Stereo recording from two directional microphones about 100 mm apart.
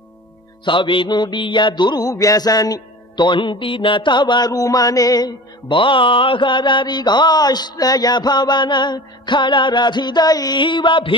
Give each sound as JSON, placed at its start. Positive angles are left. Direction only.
{"t": 0.7, "sound": "mantra", "side_deg": 55}
{"t": 5.7, "sound": "mantra", "side_deg": 55}